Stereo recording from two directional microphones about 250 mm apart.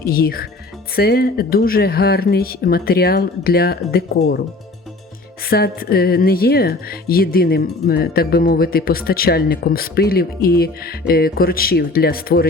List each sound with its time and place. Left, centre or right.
0.0 s speech: left
5.5 s speech: left